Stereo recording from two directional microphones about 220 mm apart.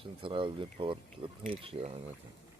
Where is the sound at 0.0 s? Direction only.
25° right (ahead or behind).